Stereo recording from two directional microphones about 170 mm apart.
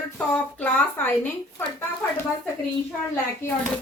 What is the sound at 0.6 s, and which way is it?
A woman's voice, 10° left (ahead or behind).